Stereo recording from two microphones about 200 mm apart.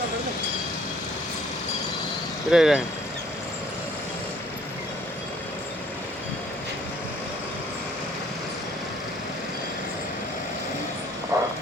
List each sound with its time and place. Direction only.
2.5 s speech: centre (ahead or behind)
11.3 s vehicle: 15° right (ahead or behind)